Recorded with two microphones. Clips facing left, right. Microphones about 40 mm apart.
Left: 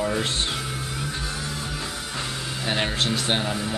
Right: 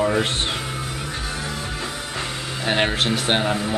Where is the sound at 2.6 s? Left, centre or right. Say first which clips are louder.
Right 5 dB; right.